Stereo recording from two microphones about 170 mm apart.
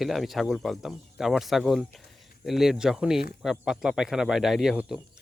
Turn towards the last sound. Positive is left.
turn(degrees=-5)  # may be behind; listen again after turning